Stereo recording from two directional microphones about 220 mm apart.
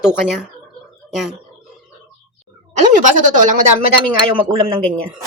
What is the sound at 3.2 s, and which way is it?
Speech, 35° right (ahead or behind).